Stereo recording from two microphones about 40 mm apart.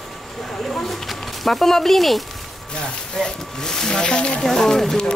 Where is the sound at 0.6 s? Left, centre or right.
Centre.